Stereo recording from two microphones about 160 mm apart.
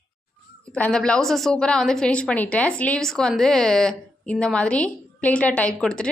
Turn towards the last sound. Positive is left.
turn(degrees=5)  # may be behind; listen again after turning